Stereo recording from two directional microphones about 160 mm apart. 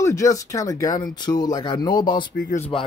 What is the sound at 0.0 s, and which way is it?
Speech, 20° left (ahead or behind).